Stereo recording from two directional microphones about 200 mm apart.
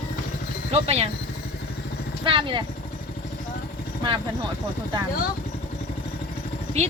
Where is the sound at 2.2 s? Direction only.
25° right (ahead or behind).